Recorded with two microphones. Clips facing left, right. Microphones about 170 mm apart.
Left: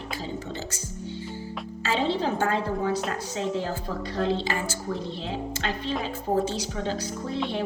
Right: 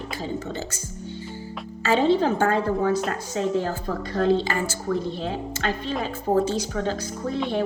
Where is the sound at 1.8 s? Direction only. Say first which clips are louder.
Right 6 dB; 50° right (ahead or behind).